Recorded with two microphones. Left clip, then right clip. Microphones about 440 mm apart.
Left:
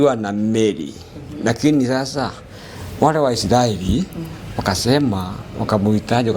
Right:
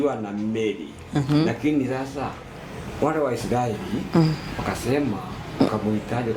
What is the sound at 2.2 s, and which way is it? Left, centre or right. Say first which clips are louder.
Speech: left 6 dB; left.